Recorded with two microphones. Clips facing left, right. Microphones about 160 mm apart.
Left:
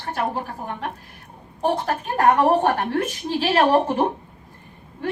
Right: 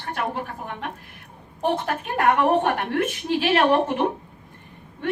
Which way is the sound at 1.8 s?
35° left (ahead or behind).